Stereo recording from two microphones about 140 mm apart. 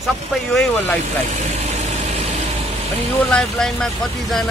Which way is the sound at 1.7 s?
50° right (ahead or behind).